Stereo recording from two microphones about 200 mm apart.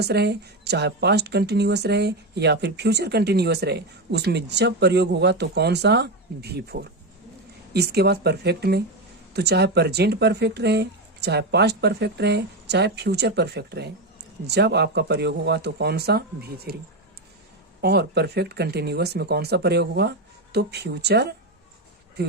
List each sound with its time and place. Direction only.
0.0 s speech: 55° right (ahead or behind)
17.7 s speech: 55° right (ahead or behind)